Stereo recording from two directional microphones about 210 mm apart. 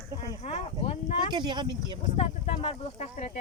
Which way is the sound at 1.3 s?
20° right (ahead or behind).